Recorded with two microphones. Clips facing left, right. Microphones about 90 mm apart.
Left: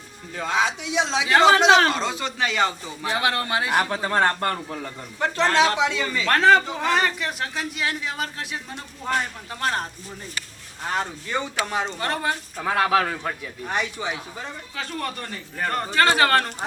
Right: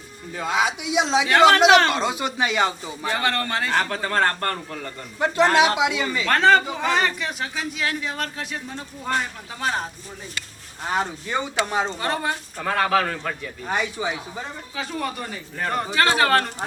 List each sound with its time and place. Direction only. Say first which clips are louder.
0.3 s a man's voice: right 1 dB; 10° right (ahead or behind)
1.9 s speech: right 2 dB; 15° right (ahead or behind)
3.0 s a man's voice: even; 10° left (ahead or behind)
5.2 s speech: right 2 dB; 15° right (ahead or behind)
6.2 s a man's voice: even; centre (ahead or behind)
10.9 s speech: right 2 dB; 15° right (ahead or behind)
11.9 s a man's voice: even; centre (ahead or behind)
13.7 s a man's voice: right 2 dB; 10° right (ahead or behind)